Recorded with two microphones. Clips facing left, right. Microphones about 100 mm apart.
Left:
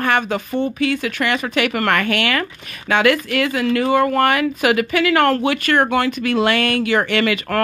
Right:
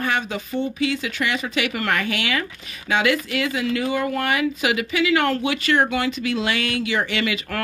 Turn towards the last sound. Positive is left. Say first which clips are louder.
# left 7 dB
turn(degrees=55)  # may be behind; listen again after turning